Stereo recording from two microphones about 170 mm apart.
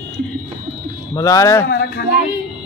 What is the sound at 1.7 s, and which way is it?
Speech, 70° left (ahead or behind).